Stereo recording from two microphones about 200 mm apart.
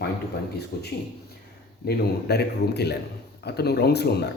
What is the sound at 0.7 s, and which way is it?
A man's voice, 55° left (ahead or behind).